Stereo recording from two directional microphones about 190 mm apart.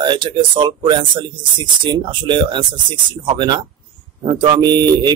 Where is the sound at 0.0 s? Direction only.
25° right (ahead or behind).